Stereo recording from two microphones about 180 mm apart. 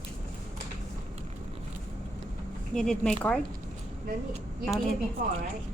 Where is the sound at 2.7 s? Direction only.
5° left (ahead or behind).